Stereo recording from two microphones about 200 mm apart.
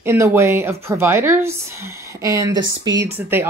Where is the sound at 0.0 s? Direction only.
10° right (ahead or behind).